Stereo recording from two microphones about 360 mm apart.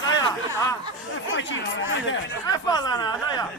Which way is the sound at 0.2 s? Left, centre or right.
Centre.